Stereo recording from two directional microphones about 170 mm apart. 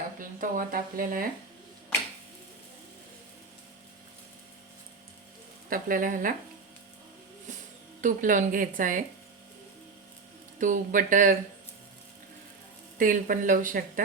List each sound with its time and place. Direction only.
0.2 s speech: 50° right (ahead or behind)
5.6 s speech: 55° right (ahead or behind)
8.0 s speech: 50° right (ahead or behind)
10.6 s speech: 50° right (ahead or behind)
13.0 s speech: 55° right (ahead or behind)